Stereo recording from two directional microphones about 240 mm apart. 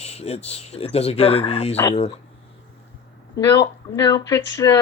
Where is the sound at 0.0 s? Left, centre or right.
Left.